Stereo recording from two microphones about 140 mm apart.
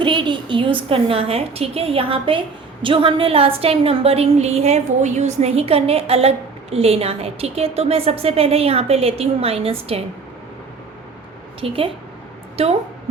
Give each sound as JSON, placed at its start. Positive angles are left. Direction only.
{"t": 0.0, "sound": "a woman's voice", "side_deg": -35}
{"t": 11.6, "sound": "a woman's voice", "side_deg": -40}